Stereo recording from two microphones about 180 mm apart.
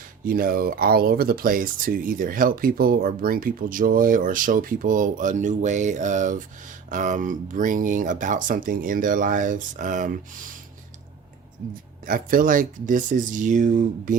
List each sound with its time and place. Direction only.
0.3 s speech: 55° right (ahead or behind)
12.0 s speech: 50° right (ahead or behind)